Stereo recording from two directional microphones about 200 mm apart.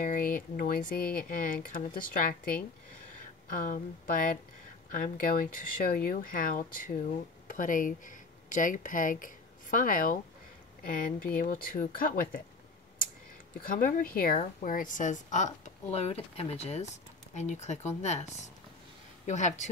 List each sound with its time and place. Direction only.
0.0 s speech: 45° left (ahead or behind)
13.7 s a woman's voice: 40° left (ahead or behind)